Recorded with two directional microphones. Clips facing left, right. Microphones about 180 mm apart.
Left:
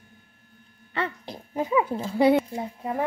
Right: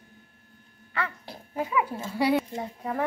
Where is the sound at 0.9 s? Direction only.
25° left (ahead or behind).